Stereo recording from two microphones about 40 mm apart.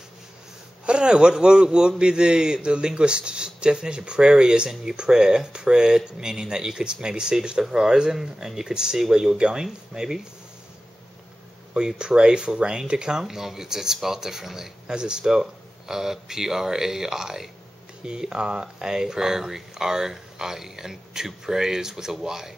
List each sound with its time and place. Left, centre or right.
0.8 s a man's voice: right
12.0 s a man's voice: right